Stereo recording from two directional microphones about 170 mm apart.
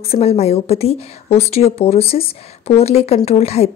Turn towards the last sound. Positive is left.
turn(degrees=40)  # may be behind; listen again after turning